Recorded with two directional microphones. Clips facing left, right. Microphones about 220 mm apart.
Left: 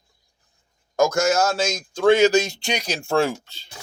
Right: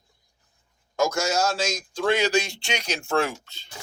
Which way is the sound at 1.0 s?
50° left (ahead or behind).